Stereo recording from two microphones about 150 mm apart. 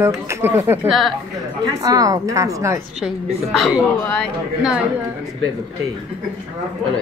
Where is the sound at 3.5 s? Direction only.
Centre (ahead or behind).